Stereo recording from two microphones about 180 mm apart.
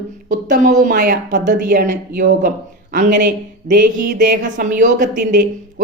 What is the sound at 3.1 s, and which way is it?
Speech, 70° right (ahead or behind).